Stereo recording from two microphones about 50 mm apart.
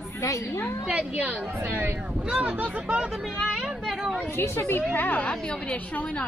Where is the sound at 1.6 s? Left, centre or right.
Right.